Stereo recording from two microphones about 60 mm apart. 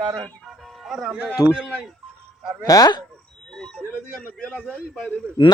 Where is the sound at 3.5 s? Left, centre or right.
Centre.